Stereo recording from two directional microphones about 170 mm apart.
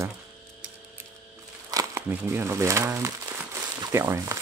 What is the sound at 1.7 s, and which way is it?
Speech, 15° right (ahead or behind).